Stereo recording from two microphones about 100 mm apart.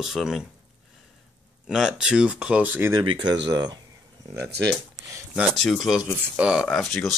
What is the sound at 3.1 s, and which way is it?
Speech, 45° right (ahead or behind).